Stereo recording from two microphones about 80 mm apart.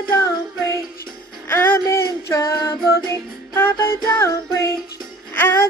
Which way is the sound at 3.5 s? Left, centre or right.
Left.